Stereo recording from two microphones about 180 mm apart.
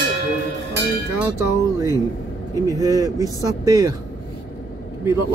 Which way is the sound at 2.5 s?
20° right (ahead or behind).